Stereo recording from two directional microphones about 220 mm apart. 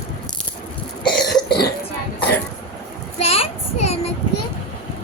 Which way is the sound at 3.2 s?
25° left (ahead or behind).